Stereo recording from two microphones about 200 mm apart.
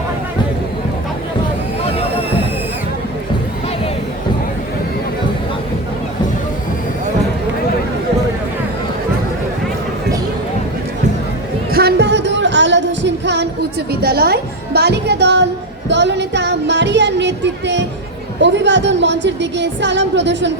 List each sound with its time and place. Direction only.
11.7 s music: 50° right (ahead or behind)
18.4 s a woman's voice: 60° right (ahead or behind)